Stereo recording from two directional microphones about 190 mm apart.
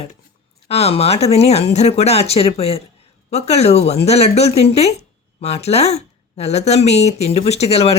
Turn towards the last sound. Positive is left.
turn(degrees=35)  # may be behind; listen again after turning